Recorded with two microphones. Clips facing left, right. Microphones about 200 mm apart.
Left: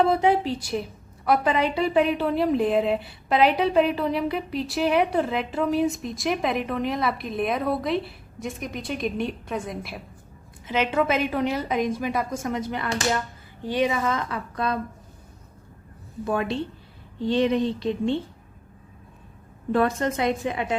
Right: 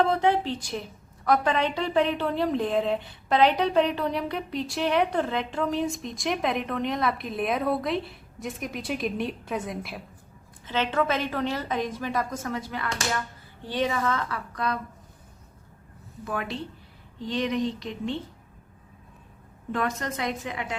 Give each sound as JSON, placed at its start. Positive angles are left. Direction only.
{"t": 0.0, "sound": "a woman's voice", "side_deg": 5}
{"t": 10.7, "sound": "a woman's voice", "side_deg": 10}
{"t": 13.7, "sound": "a woman's voice", "side_deg": 15}
{"t": 16.2, "sound": "a woman's voice", "side_deg": 25}
{"t": 19.7, "sound": "a woman's voice", "side_deg": 30}